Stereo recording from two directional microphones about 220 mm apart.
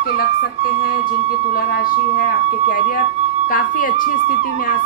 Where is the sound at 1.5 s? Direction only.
40° left (ahead or behind).